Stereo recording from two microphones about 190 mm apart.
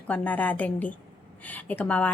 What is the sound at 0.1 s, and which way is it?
A woman's voice, 10° left (ahead or behind).